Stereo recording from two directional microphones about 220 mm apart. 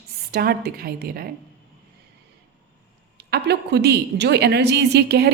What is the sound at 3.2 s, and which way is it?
A woman's voice, 45° right (ahead or behind).